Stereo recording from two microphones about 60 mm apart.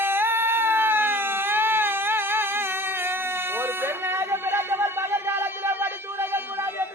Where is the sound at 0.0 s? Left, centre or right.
Right.